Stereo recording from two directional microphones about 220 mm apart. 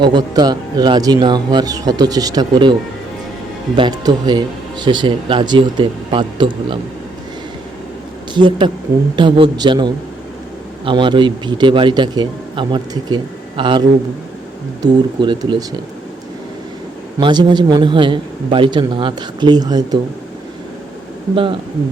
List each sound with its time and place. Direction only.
0.0 s a man's voice: 20° right (ahead or behind)
3.8 s speech: 20° right (ahead or behind)
8.3 s speech: 20° right (ahead or behind)
17.2 s speech: 20° right (ahead or behind)
21.3 s speech: 25° right (ahead or behind)